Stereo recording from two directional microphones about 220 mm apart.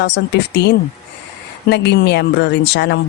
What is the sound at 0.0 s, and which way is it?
Speech, 50° left (ahead or behind).